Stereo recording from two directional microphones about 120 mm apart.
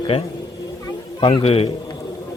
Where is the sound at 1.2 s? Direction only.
50° left (ahead or behind).